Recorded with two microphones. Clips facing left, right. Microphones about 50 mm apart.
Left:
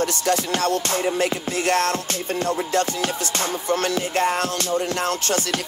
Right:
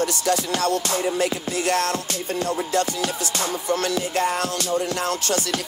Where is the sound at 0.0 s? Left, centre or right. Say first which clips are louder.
Left 1 dB; left.